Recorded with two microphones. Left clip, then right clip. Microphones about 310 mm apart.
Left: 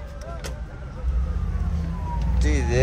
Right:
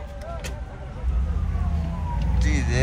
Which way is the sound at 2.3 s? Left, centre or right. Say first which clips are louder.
Left 3 dB; centre.